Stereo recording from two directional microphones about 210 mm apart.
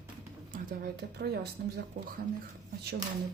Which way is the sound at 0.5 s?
50° right (ahead or behind).